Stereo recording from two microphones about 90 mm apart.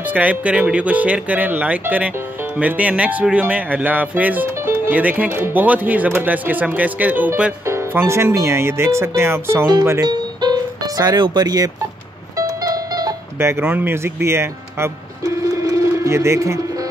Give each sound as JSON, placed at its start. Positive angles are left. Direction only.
{"t": 0.0, "sound": "speech", "side_deg": -15}
{"t": 7.6, "sound": "speech", "side_deg": -30}
{"t": 10.0, "sound": "music", "side_deg": -50}
{"t": 13.4, "sound": "speech", "side_deg": -25}
{"t": 15.6, "sound": "a sound", "side_deg": -35}